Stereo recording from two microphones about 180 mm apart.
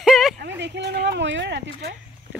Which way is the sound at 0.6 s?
70° right (ahead or behind).